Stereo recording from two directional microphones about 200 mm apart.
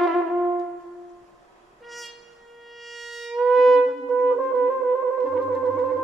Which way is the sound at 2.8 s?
Centre (ahead or behind).